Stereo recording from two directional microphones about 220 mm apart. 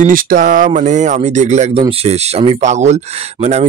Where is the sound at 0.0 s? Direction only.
40° right (ahead or behind).